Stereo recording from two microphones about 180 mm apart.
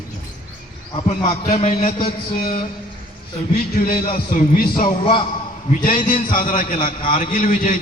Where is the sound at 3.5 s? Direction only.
55° left (ahead or behind).